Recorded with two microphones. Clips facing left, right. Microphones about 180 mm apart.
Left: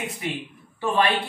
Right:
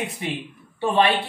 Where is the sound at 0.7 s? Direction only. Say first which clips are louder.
Right 3 dB; 25° right (ahead or behind).